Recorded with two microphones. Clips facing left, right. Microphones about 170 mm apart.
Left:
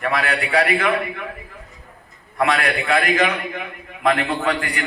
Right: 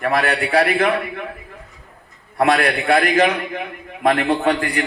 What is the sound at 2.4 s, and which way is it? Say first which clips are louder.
A man's voice: right 3 dB; 40° right (ahead or behind).